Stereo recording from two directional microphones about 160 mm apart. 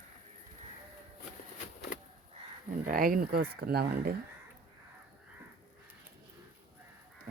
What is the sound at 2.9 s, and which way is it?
Speech, 60° right (ahead or behind).